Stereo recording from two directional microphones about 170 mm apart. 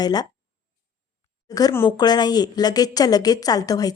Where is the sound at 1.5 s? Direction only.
20° left (ahead or behind).